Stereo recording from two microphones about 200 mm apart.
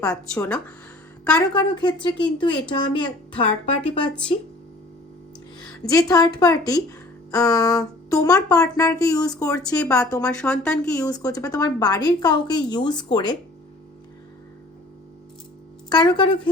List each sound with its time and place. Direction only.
0.3 s speech: 5° left (ahead or behind)
1.4 s a woman's voice: 20° left (ahead or behind)
4.1 s speech: 5° left (ahead or behind)
5.5 s speech: 20° left (ahead or behind)
7.3 s child singing: 15° left (ahead or behind)
8.4 s speech: 20° left (ahead or behind)
9.8 s speech: 5° left (ahead or behind)
11.0 s a woman's voice: 20° left (ahead or behind)
15.9 s a woman's voice: 20° left (ahead or behind)